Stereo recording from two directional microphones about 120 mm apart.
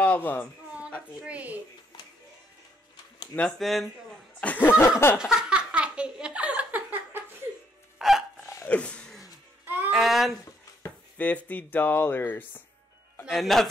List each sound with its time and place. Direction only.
0.0 s speech: 15° left (ahead or behind)
1.2 s speech: 10° right (ahead or behind)
3.3 s speech: 5° left (ahead or behind)
4.4 s speech: 15° left (ahead or behind)
5.2 s a sound: 5° right (ahead or behind)
8.0 s dog: 5° right (ahead or behind)
8.6 s a sound: 10° left (ahead or behind)
9.7 s music: 15° right (ahead or behind)
9.9 s speech: centre (ahead or behind)
11.4 s speech: 15° left (ahead or behind)
13.2 s speech: centre (ahead or behind)